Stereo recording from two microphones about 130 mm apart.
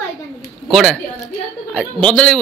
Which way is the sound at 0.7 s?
Centre (ahead or behind).